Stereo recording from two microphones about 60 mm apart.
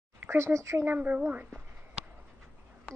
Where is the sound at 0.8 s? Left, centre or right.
Right.